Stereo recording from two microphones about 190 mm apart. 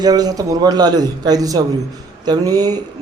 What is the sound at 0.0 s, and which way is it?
A man's voice, 20° right (ahead or behind).